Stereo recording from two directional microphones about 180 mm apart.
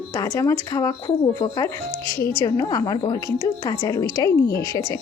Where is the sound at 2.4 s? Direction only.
20° left (ahead or behind).